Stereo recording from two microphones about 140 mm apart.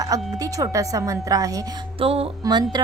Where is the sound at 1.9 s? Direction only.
45° right (ahead or behind).